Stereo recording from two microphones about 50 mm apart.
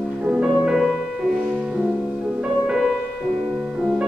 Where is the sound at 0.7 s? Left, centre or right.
Centre.